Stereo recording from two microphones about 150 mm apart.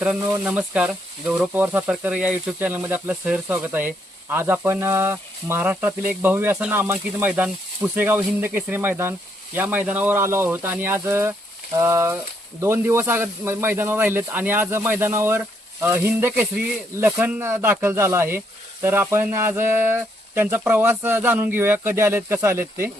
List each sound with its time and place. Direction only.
0.0 s speech: 10° right (ahead or behind)